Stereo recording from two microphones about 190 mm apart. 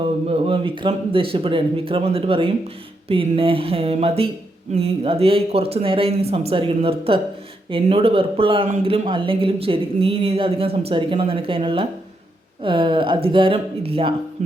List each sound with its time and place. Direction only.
0.0 s speech: 30° right (ahead or behind)